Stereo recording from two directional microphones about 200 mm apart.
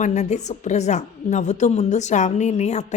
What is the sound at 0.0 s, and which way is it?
A woman's voice, 35° left (ahead or behind).